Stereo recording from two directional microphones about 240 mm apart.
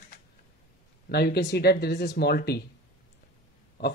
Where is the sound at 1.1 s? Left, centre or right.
Left.